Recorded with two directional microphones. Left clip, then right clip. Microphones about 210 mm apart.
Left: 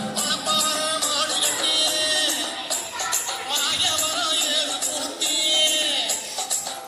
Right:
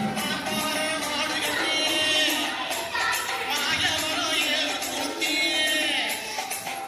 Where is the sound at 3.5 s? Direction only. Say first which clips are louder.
Left 4 dB; 55° left (ahead or behind).